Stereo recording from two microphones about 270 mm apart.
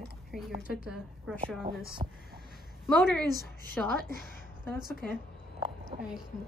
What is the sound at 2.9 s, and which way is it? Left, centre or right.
Speech, centre.